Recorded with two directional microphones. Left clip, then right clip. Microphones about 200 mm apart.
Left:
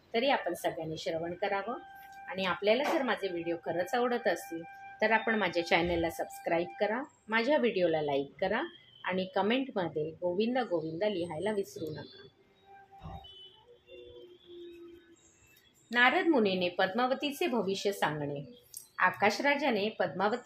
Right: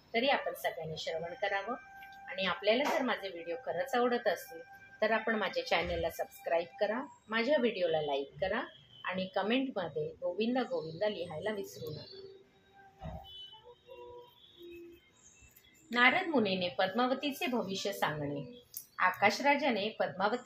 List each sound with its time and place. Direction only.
0.1 s speech: 40° left (ahead or behind)
15.9 s speech: 35° left (ahead or behind)